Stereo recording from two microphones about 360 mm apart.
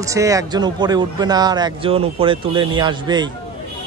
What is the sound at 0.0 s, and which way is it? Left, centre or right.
Speech, centre.